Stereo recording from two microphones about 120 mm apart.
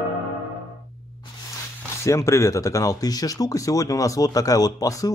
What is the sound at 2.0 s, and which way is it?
Speech, 25° left (ahead or behind).